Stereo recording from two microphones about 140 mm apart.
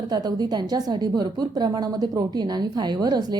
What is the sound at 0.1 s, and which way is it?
A woman's voice, 30° right (ahead or behind).